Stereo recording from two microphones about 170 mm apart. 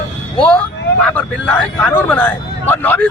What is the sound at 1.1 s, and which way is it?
Speech, 5° left (ahead or behind).